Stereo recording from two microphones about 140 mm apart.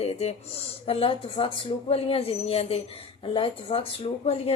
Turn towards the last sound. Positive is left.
turn(degrees=45)  # may be behind; listen again after turning